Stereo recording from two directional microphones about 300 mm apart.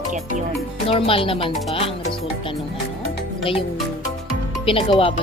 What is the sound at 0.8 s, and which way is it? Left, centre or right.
Speech, centre.